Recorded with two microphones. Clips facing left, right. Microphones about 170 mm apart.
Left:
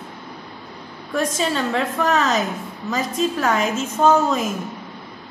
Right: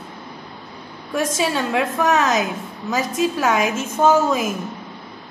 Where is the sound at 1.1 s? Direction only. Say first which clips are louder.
Right 1 dB; 10° right (ahead or behind).